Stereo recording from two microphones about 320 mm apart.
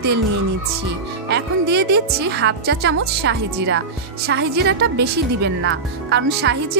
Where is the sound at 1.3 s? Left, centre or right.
Right.